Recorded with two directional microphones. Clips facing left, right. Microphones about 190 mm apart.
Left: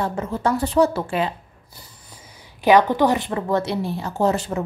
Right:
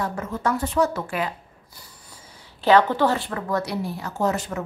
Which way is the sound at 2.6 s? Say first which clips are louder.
Left 2 dB; 15° left (ahead or behind).